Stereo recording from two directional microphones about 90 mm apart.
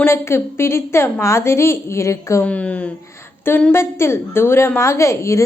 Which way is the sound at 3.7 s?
30° left (ahead or behind).